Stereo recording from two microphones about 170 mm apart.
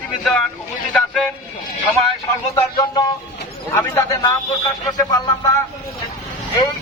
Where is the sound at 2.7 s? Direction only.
25° left (ahead or behind).